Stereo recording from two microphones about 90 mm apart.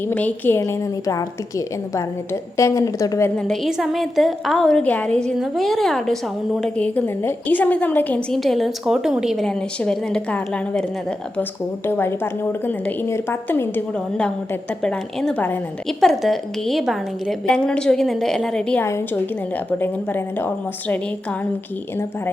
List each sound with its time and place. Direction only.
0.1 s a woman's voice: 15° left (ahead or behind)
0.7 s a woman's voice: 40° left (ahead or behind)
3.3 s a woman's voice: 5° left (ahead or behind)
4.8 s a woman's voice: 15° left (ahead or behind)
5.4 s a woman's voice: centre (ahead or behind)
6.7 s a woman's voice: 15° left (ahead or behind)
8.3 s a woman's voice: centre (ahead or behind)
11.9 s a woman's voice: 25° left (ahead or behind)
14.8 s a woman's voice: 10° left (ahead or behind)
15.9 s a woman's voice: 5° left (ahead or behind)
18.9 s a woman's voice: 30° left (ahead or behind)